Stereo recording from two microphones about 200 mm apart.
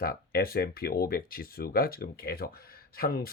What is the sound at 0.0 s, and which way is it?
Speech, 50° left (ahead or behind).